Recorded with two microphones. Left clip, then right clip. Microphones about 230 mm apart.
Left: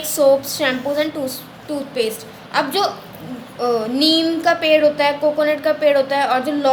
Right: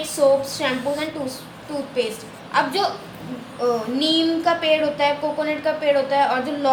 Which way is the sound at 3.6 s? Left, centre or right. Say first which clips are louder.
Left 4 dB; left.